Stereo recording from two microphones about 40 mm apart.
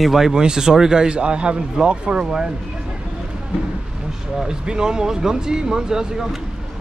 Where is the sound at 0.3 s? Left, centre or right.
Centre.